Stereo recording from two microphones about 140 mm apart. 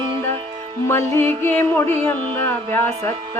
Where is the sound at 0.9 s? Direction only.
15° left (ahead or behind).